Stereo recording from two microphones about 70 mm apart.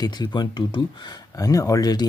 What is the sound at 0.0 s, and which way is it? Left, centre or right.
Speech, left.